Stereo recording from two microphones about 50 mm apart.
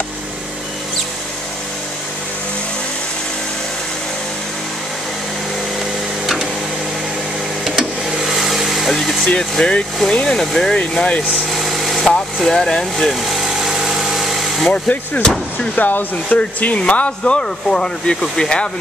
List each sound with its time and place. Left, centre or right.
6.2 s printer: centre
7.6 s vehicle: centre
9.2 s speech: centre
10.8 s speech: left
11.5 s vehicle: centre
12.4 s engine: centre
15.7 s speech: left; by 18.7 s centre